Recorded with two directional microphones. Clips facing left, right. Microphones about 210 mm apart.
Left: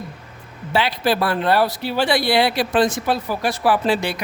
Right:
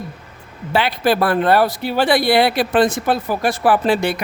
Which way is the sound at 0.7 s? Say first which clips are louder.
Right 2 dB; 55° right (ahead or behind).